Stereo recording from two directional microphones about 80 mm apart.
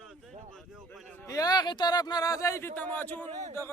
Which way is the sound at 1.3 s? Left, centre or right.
Left.